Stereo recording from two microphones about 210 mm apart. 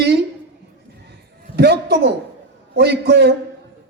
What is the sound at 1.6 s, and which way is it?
A man's voice, 50° right (ahead or behind).